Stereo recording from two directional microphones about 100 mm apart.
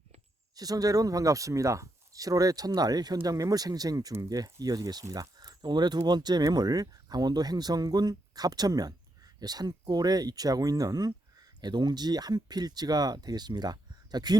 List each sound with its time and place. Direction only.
0.5 s speech: 40° right (ahead or behind)